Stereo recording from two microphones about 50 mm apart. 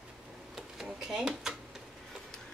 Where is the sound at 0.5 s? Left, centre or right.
Centre.